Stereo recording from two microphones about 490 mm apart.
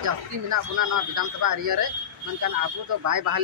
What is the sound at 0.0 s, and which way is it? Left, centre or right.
Speech, right.